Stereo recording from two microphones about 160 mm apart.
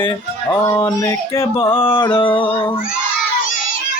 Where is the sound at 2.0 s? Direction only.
30° left (ahead or behind).